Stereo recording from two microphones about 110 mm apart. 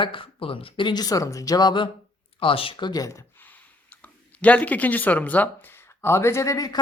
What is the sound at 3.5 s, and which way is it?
Speech, 15° left (ahead or behind).